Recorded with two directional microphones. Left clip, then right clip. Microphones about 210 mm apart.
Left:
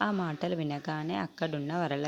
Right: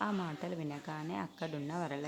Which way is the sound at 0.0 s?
30° left (ahead or behind).